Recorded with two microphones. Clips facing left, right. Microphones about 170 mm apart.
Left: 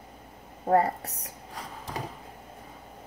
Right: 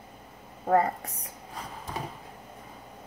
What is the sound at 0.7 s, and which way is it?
Speech, 35° left (ahead or behind).